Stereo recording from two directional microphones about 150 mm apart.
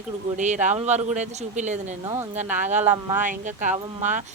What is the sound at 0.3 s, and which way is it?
A woman's voice, 55° right (ahead or behind).